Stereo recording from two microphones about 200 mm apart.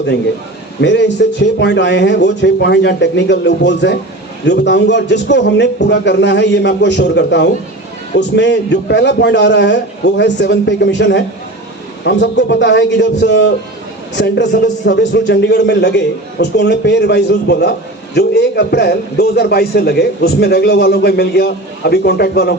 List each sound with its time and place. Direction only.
0.8 s a man's voice: 60° left (ahead or behind)
14.8 s a man's voice: 60° left (ahead or behind)